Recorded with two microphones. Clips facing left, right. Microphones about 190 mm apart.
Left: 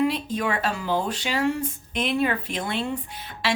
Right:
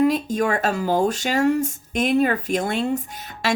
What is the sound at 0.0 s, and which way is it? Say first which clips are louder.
A woman's voice: right 5 dB; 45° right (ahead or behind).